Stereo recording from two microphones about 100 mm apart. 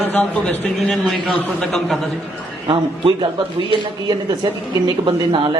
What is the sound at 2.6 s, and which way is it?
Speech, 55° right (ahead or behind).